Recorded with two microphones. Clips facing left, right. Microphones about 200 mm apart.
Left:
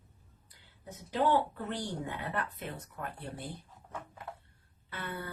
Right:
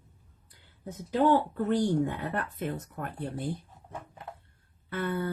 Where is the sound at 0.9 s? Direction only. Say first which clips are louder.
Right 5 dB; 45° right (ahead or behind).